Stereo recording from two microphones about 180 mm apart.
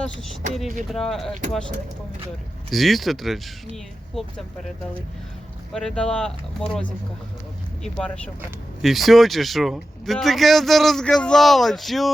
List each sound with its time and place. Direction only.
0.0 s speech: centre (ahead or behind)
2.6 s speech: centre (ahead or behind)
5.7 s speech: 5° left (ahead or behind)
7.9 s speech: 5° left (ahead or behind)